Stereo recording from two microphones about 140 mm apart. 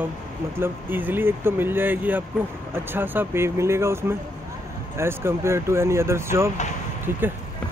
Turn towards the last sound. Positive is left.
turn(degrees=-15)  # may be behind; listen again after turning